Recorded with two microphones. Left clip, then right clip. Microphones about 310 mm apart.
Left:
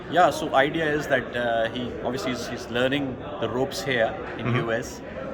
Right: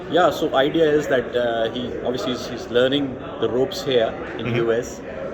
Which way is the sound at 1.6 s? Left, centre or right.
Left.